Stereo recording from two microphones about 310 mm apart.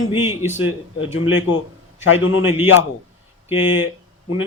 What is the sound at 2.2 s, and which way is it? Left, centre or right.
Speech, left.